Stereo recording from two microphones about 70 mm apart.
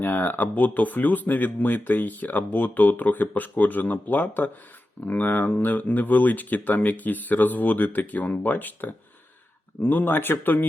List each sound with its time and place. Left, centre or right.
0.0 s speech: left